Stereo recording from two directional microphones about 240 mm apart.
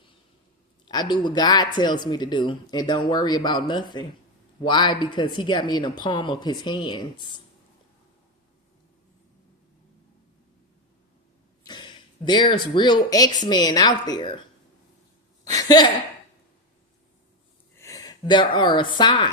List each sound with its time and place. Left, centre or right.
0.9 s speech: centre
11.6 s speech: centre
15.4 s speech: centre
17.7 s speech: centre